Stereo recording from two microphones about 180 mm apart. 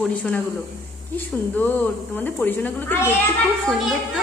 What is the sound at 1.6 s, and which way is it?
A woman's voice, 10° left (ahead or behind).